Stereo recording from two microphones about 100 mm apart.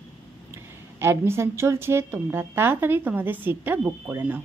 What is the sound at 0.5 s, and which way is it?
A woman's voice, 25° right (ahead or behind).